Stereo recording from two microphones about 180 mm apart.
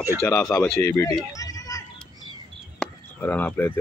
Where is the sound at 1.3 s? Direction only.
20° left (ahead or behind).